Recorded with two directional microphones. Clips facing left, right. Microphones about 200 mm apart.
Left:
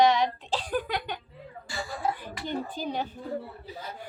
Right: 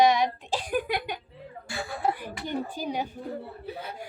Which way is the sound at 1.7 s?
60° right (ahead or behind).